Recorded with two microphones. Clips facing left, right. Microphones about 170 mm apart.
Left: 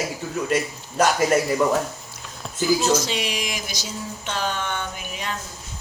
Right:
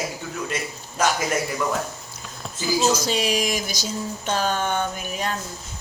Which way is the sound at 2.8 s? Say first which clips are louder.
Right 1 dB; 40° right (ahead or behind).